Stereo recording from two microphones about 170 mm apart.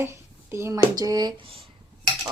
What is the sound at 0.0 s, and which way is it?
Speech, 15° right (ahead or behind).